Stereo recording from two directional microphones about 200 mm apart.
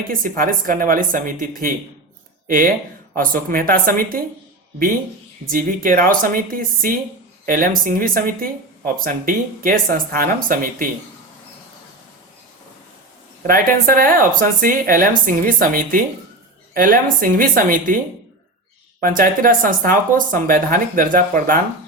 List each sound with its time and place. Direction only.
0.1 s speech: 45° right (ahead or behind)
5.5 s speech: 45° right (ahead or behind)
13.5 s speech: 45° right (ahead or behind)
19.0 s speech: 45° right (ahead or behind)